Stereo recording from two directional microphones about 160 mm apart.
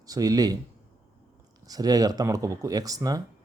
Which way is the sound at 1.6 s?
25° right (ahead or behind).